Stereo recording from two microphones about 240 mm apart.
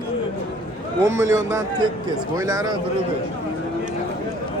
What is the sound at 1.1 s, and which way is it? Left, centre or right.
Speech, centre.